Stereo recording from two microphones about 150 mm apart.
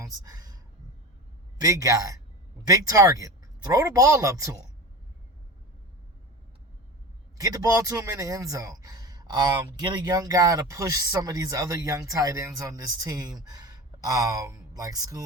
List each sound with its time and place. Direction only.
0.0 s a sound: 25° right (ahead or behind)
1.5 s speech: 20° right (ahead or behind)
7.3 s speech: 25° right (ahead or behind)